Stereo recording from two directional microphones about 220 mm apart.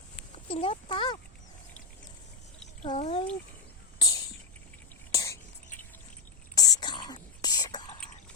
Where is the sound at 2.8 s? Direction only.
30° left (ahead or behind).